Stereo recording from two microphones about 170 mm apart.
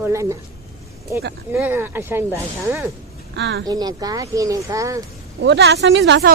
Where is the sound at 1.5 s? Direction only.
15° right (ahead or behind).